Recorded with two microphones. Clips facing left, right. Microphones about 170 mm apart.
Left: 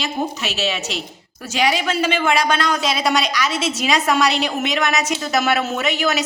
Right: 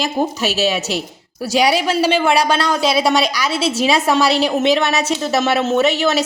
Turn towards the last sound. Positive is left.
turn(degrees=-30)  # may be behind; listen again after turning